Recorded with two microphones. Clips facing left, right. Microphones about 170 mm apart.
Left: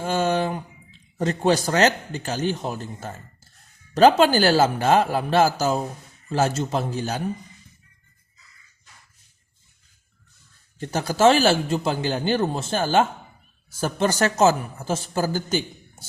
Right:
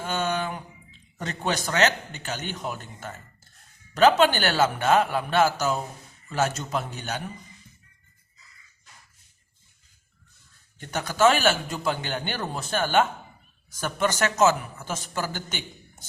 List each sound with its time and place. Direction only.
0.0 s a man's voice: 30° left (ahead or behind)
10.8 s a man's voice: 30° left (ahead or behind)